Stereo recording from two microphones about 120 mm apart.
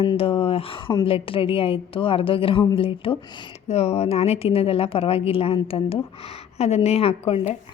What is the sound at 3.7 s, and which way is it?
A woman's voice, 60° left (ahead or behind).